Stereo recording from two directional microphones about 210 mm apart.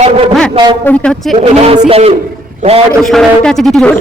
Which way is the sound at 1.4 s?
30° right (ahead or behind).